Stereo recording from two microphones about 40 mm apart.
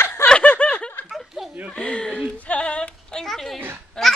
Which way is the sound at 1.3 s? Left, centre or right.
Centre.